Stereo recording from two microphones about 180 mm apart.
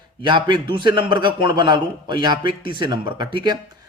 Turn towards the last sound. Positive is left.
turn(degrees=-25)  # may be behind; listen again after turning